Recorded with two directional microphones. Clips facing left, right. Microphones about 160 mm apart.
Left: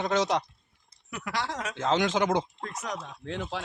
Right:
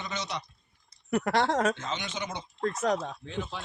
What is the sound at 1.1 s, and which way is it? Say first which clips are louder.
Speech: right 8 dB; 55° right (ahead or behind).